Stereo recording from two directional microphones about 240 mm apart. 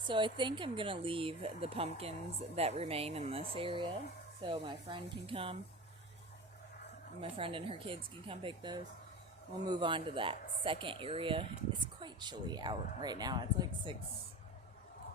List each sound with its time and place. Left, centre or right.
0.1 s speech: centre
7.2 s speech: right